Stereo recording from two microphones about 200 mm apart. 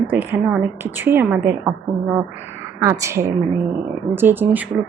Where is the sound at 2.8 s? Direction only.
15° right (ahead or behind).